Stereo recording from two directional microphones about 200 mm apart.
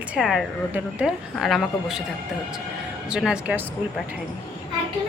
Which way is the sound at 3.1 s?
5° right (ahead or behind).